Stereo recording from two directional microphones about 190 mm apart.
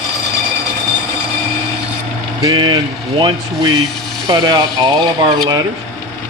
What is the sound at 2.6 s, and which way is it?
Speech, 25° right (ahead or behind).